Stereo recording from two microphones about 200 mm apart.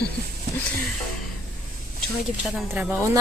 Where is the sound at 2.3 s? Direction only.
10° right (ahead or behind).